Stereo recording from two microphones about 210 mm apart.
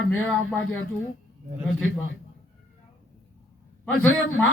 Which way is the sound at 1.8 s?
70° left (ahead or behind).